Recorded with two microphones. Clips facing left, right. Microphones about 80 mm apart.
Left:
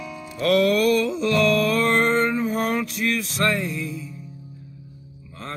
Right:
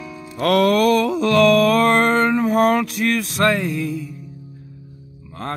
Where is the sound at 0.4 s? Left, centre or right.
Right.